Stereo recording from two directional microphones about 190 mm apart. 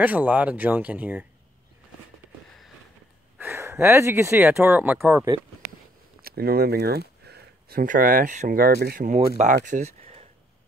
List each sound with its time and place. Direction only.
0.0 s speech: 10° right (ahead or behind)
3.3 s speech: 10° right (ahead or behind)
6.2 s speech: 55° right (ahead or behind); by 10.2 s 35° right (ahead or behind)